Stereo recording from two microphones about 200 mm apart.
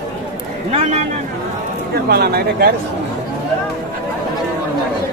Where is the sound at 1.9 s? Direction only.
50° right (ahead or behind).